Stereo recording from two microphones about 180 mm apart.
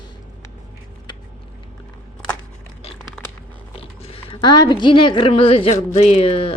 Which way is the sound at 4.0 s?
30° left (ahead or behind).